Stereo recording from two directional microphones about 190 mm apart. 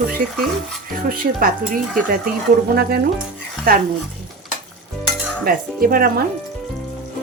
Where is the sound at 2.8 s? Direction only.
55° right (ahead or behind).